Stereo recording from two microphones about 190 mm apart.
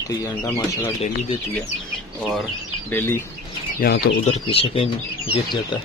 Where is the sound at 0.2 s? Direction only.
20° left (ahead or behind).